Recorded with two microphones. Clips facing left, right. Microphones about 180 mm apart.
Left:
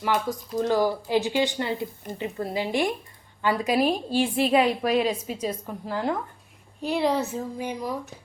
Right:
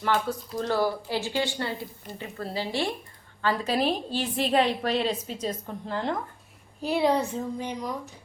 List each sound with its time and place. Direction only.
0.0 s speech: 15° left (ahead or behind)